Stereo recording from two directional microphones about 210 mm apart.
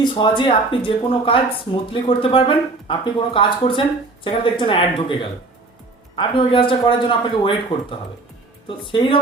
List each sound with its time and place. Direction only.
0.0 s speech: 20° left (ahead or behind)